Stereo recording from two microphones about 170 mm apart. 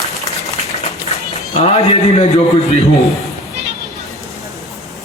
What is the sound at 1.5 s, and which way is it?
Speech, 35° left (ahead or behind).